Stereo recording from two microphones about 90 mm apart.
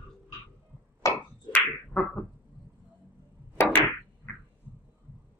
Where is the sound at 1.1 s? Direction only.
15° left (ahead or behind).